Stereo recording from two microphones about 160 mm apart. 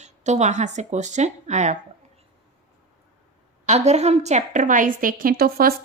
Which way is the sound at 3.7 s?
45° right (ahead or behind).